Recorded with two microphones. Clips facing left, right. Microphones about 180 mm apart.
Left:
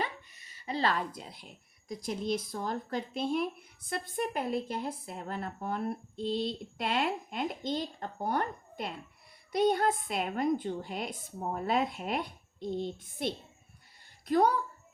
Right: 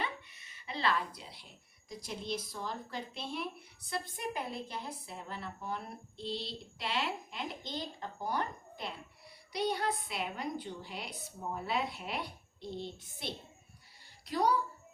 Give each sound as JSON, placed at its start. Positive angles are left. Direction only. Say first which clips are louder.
{"t": 0.0, "sound": "dog", "louder": "left 3 dB", "side_deg": 40}
{"t": 1.9, "sound": "a woman's voice", "louder": "left 7 dB", "side_deg": 50}